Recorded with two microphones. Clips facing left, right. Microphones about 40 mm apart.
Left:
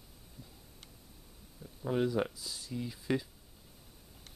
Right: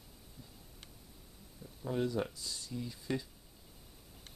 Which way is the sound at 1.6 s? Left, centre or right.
Left.